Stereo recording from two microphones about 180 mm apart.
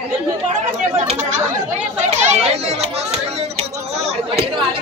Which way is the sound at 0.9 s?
35° right (ahead or behind).